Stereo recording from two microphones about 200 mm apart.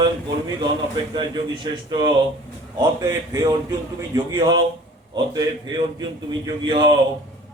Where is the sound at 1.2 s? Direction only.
20° right (ahead or behind).